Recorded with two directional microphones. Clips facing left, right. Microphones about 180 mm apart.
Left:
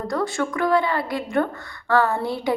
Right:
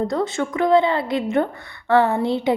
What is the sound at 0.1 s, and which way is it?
A woman's voice, 20° right (ahead or behind).